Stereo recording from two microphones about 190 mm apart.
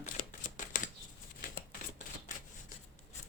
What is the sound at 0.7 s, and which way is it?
Shuffling cards, 40° left (ahead or behind).